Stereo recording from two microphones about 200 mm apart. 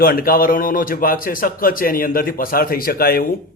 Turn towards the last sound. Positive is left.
turn(degrees=50)  # may be behind; listen again after turning